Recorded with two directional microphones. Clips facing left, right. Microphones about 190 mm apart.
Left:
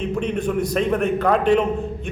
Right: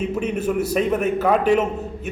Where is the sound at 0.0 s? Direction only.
5° right (ahead or behind).